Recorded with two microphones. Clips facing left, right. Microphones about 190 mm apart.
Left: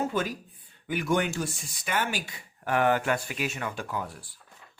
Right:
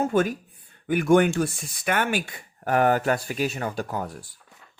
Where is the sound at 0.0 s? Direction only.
50° right (ahead or behind).